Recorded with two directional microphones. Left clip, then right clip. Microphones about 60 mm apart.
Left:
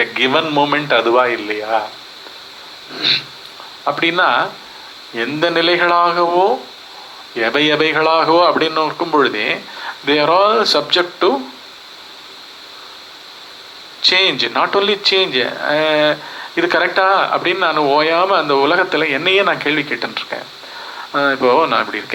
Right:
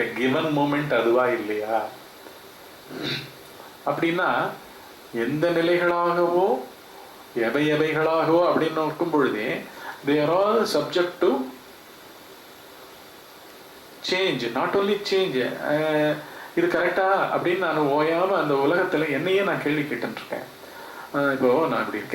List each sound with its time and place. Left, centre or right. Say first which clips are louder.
0.1 s speech: left 9 dB; right
2.9 s speech: left 14 dB; right
14.2 s speech: left 10 dB; right